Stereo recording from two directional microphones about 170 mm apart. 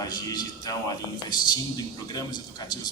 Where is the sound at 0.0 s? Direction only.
25° left (ahead or behind).